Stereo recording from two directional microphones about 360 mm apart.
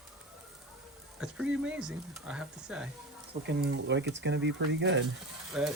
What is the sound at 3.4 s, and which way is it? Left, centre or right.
Speech, right.